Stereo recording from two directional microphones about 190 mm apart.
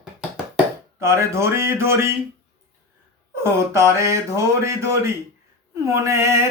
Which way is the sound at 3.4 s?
15° right (ahead or behind).